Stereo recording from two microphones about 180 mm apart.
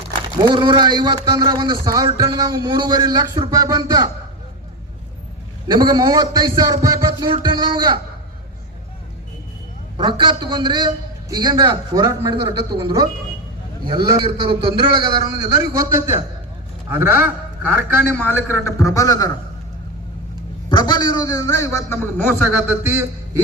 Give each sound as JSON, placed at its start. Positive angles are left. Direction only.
{"t": 0.3, "sound": "speech", "side_deg": -25}
{"t": 5.6, "sound": "speech", "side_deg": -25}
{"t": 10.0, "sound": "a man's voice", "side_deg": -25}
{"t": 18.1, "sound": "a man's voice", "side_deg": 10}
{"t": 20.7, "sound": "a man's voice", "side_deg": 25}
{"t": 22.5, "sound": "a man's voice", "side_deg": -15}